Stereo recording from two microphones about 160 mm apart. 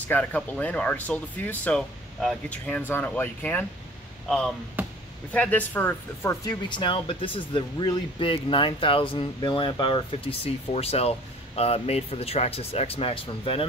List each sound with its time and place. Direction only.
0.1 s speech: 10° left (ahead or behind)
4.8 s chop: 10° right (ahead or behind)
5.3 s speech: 10° left (ahead or behind)
6.7 s speech: 30° left (ahead or behind)